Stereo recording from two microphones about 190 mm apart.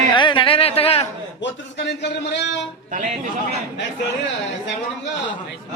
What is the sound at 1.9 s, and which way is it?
Speech, 65° left (ahead or behind).